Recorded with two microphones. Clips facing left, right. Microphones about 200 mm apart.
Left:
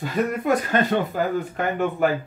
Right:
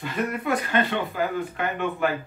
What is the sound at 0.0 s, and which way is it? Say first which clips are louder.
Speech: left 4 dB; 40° left (ahead or behind).